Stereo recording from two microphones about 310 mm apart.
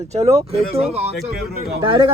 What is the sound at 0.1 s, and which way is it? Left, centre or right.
Speech, right.